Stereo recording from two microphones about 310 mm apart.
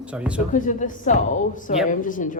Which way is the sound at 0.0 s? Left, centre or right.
Centre.